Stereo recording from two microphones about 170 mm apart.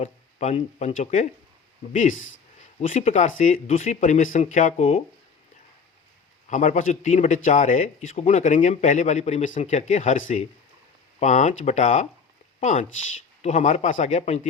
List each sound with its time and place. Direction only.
0.0 s a man's voice: 45° left (ahead or behind)
6.5 s a man's voice: 45° left (ahead or behind)
12.5 s a sound: 45° left (ahead or behind)
13.4 s a man's voice: 45° left (ahead or behind)